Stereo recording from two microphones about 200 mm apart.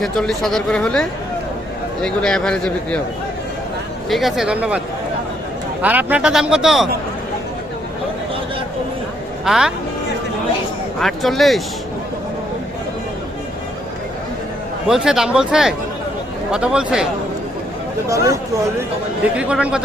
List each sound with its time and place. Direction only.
0.0 s speech: centre (ahead or behind)
4.1 s speech: centre (ahead or behind)
5.8 s speech: 10° right (ahead or behind)
9.4 s speech: centre (ahead or behind)
11.0 s speech: centre (ahead or behind)
14.8 s speech: 5° right (ahead or behind)
18.1 s speech: 15° right (ahead or behind)